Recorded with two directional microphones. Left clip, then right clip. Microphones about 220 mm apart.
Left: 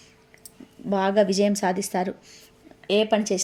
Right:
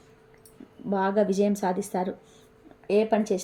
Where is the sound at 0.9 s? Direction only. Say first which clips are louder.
Left 3 dB; 15° left (ahead or behind).